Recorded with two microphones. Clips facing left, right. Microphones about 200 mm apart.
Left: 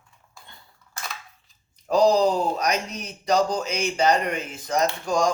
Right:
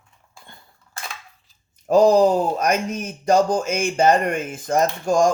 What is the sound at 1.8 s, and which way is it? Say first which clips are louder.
Speech: right 4 dB; 50° right (ahead or behind).